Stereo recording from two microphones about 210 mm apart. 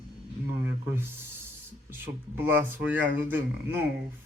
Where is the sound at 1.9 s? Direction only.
10° right (ahead or behind).